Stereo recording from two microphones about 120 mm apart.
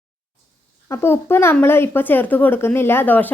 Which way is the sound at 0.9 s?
20° left (ahead or behind).